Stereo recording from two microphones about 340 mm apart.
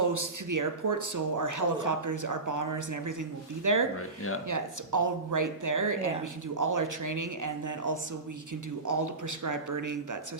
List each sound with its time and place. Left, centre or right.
0.0 s speech: right
3.9 s speech: left
4.4 s speech: right